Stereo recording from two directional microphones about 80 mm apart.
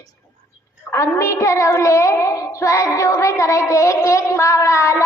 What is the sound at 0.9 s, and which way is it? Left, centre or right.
Child singing, left.